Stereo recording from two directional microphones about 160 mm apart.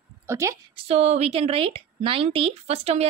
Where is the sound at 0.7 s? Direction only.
40° right (ahead or behind).